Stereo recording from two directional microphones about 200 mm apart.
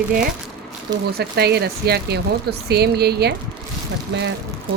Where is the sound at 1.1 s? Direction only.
55° right (ahead or behind).